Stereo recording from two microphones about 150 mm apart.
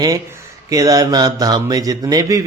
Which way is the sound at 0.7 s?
25° right (ahead or behind).